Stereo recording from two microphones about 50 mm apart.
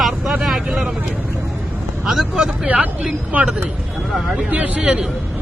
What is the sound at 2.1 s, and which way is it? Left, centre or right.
Speech, centre.